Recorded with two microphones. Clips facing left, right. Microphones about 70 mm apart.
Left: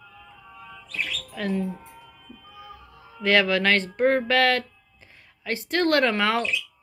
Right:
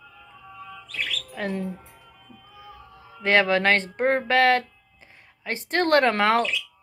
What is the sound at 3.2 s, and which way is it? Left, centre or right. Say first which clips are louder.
Speech: right 1 dB; right.